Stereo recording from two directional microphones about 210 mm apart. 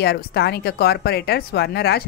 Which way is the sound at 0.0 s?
50° left (ahead or behind).